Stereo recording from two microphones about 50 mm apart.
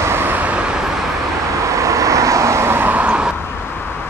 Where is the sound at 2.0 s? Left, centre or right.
Right.